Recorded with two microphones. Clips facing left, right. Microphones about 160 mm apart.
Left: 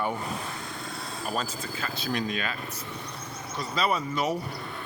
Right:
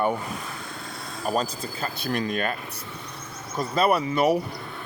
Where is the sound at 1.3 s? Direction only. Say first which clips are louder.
Right 6 dB; 40° right (ahead or behind).